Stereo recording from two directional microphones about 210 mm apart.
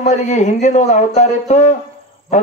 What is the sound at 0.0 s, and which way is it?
Speech, 35° left (ahead or behind).